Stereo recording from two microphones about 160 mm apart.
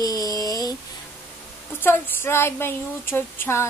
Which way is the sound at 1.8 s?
15° left (ahead or behind).